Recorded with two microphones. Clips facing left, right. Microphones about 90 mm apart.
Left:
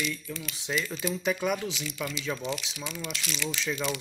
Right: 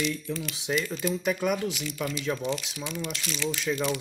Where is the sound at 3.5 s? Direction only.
5° right (ahead or behind).